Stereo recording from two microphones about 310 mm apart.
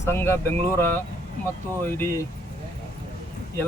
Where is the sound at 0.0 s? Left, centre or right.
Centre.